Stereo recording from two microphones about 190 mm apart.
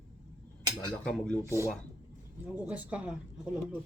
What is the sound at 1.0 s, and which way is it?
Speech, 5° left (ahead or behind).